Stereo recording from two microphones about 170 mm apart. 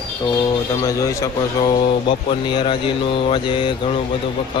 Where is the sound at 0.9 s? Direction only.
20° left (ahead or behind).